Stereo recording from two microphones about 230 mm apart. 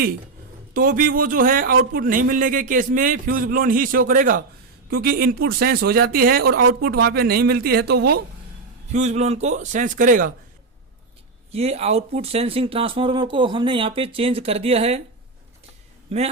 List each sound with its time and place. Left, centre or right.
0.7 s speech: right
8.9 s speech: right
11.5 s speech: right
16.0 s speech: right